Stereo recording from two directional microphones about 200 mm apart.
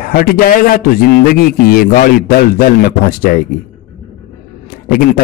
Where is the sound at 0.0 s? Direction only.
45° left (ahead or behind).